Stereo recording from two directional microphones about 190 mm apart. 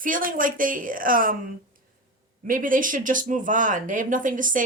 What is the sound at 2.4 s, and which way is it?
Speech, 45° right (ahead or behind).